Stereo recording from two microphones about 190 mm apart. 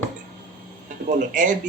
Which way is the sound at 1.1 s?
40° right (ahead or behind).